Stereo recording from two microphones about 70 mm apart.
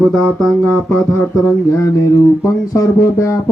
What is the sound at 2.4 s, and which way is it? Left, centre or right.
Speech, left.